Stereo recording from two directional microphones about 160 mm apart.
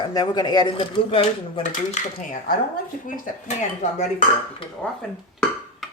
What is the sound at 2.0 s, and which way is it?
Speech, 50° left (ahead or behind).